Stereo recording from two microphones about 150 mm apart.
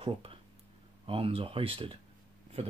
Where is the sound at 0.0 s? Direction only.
35° right (ahead or behind).